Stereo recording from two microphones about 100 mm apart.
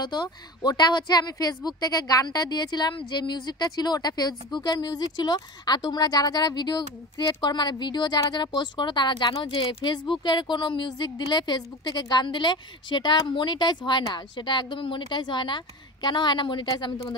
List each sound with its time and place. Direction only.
0.0 s a woman's voice: 45° left (ahead or behind)